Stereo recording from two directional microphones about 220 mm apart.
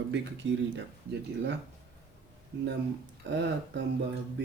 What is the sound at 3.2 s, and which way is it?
Speech, 50° right (ahead or behind).